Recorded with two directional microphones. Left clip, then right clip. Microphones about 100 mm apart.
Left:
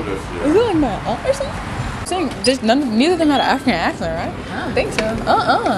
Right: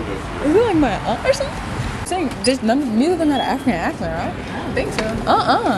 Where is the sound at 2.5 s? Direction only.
15° left (ahead or behind).